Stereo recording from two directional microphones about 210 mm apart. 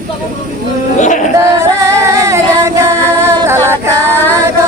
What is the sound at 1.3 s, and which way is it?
Female singing, 15° right (ahead or behind).